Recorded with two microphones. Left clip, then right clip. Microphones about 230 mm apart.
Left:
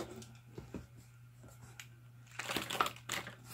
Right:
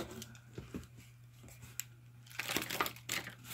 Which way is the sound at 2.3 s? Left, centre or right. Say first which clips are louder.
Right 1 dB; centre.